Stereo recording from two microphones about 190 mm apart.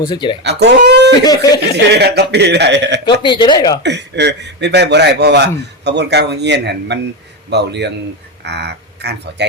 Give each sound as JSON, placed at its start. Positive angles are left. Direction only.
{"t": 0.0, "sound": "speech", "side_deg": 25}
{"t": 0.4, "sound": "speech", "side_deg": -60}
{"t": 1.2, "sound": "speech", "side_deg": 20}
{"t": 1.7, "sound": "a man's voice", "side_deg": -60}
{"t": 3.2, "sound": "speech", "side_deg": 25}
{"t": 3.8, "sound": "a man's voice", "side_deg": -65}